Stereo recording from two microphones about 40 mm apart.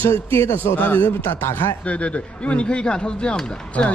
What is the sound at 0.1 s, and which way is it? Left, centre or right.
Speech, left.